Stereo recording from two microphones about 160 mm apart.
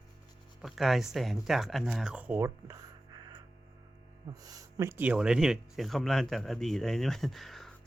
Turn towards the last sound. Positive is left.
turn(degrees=0)  # may be behind; listen again after turning